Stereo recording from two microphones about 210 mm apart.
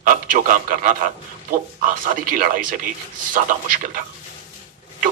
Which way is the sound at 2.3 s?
40° right (ahead or behind).